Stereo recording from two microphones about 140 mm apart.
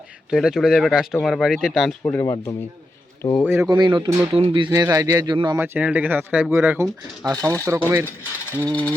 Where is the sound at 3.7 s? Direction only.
35° right (ahead or behind).